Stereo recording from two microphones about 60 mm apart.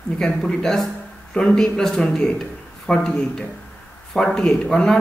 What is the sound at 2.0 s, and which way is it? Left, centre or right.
A man's voice, centre.